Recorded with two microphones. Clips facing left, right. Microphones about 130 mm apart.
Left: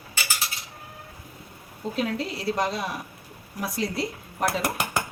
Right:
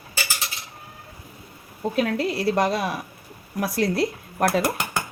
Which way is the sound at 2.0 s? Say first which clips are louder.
Right 5 dB; 60° right (ahead or behind).